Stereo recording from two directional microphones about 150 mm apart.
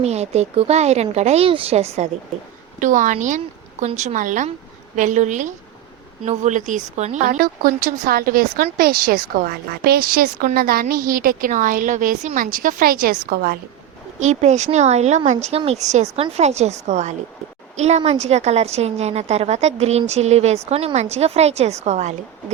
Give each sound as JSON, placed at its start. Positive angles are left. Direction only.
{"t": 0.0, "sound": "a woman's voice", "side_deg": -45}
{"t": 2.8, "sound": "a woman's voice", "side_deg": -55}
{"t": 7.3, "sound": "a woman's voice", "side_deg": -80}
{"t": 14.2, "sound": "a woman's voice", "side_deg": -50}